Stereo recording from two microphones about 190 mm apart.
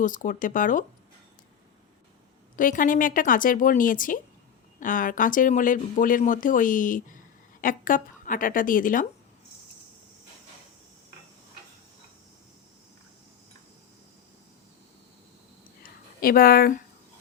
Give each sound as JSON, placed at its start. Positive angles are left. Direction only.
{"t": 0.0, "sound": "speech", "side_deg": 45}
{"t": 2.6, "sound": "speech", "side_deg": 45}
{"t": 16.2, "sound": "speech", "side_deg": 50}